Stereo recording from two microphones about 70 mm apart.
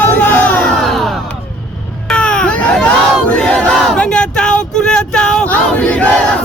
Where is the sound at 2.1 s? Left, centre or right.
Centre.